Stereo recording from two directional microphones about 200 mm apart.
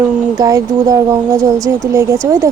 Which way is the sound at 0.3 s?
20° right (ahead or behind).